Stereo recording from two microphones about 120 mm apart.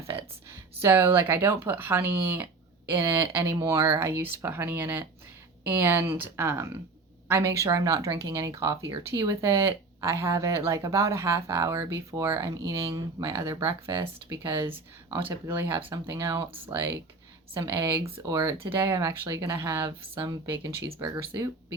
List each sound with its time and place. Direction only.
0.8 s speech: 20° right (ahead or behind)
13.9 s speech: 50° right (ahead or behind)
14.3 s speech: 25° right (ahead or behind)
18.6 s speech: 20° right (ahead or behind)